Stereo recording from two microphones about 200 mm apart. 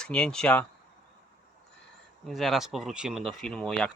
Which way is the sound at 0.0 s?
5° left (ahead or behind).